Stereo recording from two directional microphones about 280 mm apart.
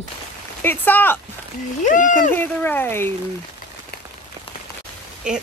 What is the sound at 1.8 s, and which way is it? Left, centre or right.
Speech, left.